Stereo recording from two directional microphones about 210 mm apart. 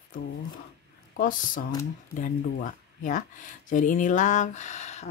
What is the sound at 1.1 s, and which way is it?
Speech, 40° left (ahead or behind).